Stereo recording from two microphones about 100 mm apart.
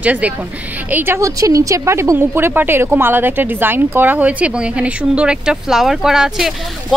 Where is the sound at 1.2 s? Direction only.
35° right (ahead or behind).